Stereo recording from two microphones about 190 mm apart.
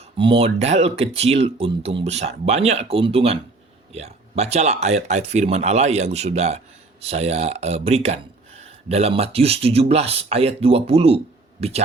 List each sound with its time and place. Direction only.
0.2 s speech: 30° right (ahead or behind)